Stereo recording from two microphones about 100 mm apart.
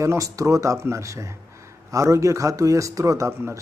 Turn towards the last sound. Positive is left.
turn(degrees=-30)  # may be behind; listen again after turning